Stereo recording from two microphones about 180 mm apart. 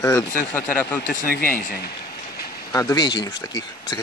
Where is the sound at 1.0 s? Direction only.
60° left (ahead or behind).